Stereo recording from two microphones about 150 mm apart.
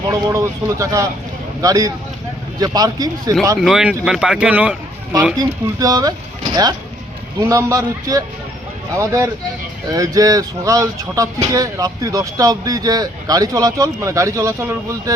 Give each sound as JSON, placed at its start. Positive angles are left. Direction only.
{"t": 0.1, "sound": "speech", "side_deg": -20}
{"t": 3.6, "sound": "a man's voice", "side_deg": -5}
{"t": 5.4, "sound": "speech", "side_deg": -25}